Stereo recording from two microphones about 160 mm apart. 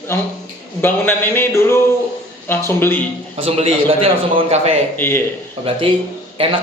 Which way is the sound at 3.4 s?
35° right (ahead or behind).